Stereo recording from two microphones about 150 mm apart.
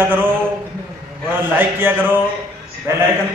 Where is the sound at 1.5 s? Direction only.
15° right (ahead or behind).